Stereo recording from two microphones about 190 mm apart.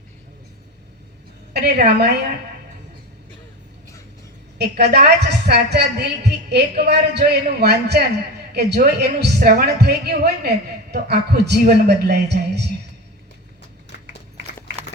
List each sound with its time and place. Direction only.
1.5 s a woman's voice: 60° right (ahead or behind)
4.5 s a woman's voice: 60° right (ahead or behind)